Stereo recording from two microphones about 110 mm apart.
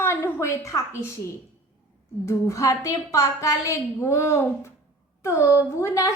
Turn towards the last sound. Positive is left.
turn(degrees=25)  # may be behind; listen again after turning